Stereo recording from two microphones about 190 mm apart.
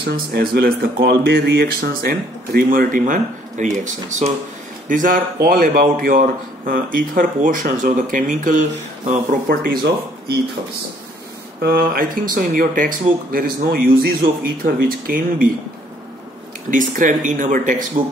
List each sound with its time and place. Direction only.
0.0 s speech: 55° right (ahead or behind); by 9.4 s 40° right (ahead or behind)
9.5 s speech: 55° right (ahead or behind)
11.6 s speech: 55° right (ahead or behind)
16.7 s speech: 45° right (ahead or behind)